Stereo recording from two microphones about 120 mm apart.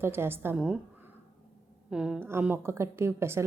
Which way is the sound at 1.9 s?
5° right (ahead or behind).